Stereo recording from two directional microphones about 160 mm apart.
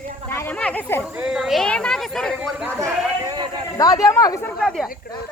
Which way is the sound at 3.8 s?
25° left (ahead or behind).